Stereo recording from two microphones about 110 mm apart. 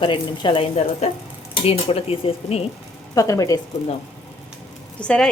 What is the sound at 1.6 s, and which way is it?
Speech, 65° left (ahead or behind).